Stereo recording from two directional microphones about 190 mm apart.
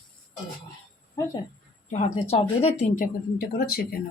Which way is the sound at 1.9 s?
40° left (ahead or behind).